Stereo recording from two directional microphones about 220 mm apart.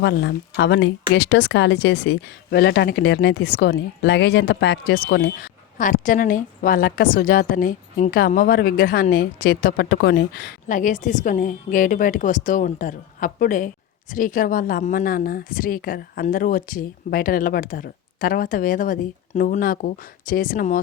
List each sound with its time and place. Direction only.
0.0 s a woman's voice: 50° left (ahead or behind)